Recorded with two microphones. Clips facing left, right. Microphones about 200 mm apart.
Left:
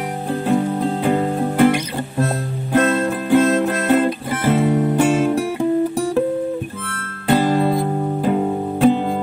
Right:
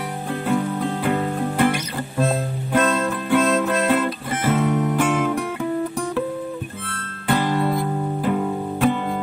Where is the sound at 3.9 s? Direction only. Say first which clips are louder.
Left 4 dB; 30° left (ahead or behind).